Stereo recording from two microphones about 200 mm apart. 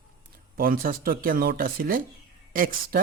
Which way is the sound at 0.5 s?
45° right (ahead or behind).